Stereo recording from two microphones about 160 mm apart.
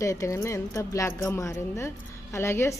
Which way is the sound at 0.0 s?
20° left (ahead or behind).